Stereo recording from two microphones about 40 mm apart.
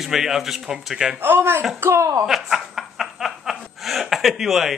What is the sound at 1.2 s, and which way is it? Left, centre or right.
Speech, right.